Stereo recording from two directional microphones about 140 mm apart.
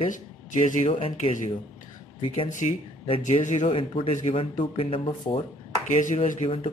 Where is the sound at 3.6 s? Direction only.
40° left (ahead or behind).